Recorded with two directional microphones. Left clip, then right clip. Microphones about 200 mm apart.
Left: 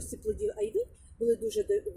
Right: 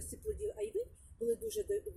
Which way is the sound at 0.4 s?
40° left (ahead or behind).